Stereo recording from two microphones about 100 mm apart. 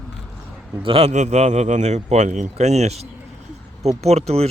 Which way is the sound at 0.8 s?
75° right (ahead or behind).